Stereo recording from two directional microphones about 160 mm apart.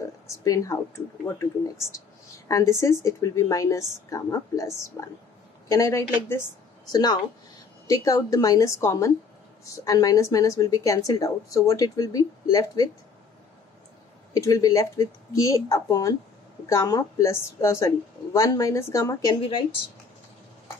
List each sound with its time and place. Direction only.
0.4 s a woman's voice: 20° left (ahead or behind)
14.3 s a woman's voice: 20° left (ahead or behind)